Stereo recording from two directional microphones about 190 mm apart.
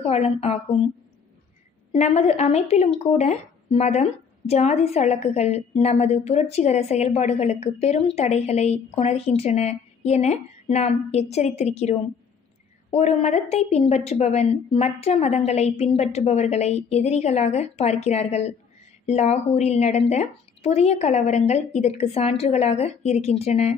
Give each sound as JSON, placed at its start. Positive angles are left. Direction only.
{"t": 0.0, "sound": "speech", "side_deg": 35}
{"t": 1.9, "sound": "speech", "side_deg": 35}